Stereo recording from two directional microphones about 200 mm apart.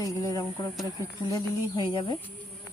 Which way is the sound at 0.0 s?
15° left (ahead or behind).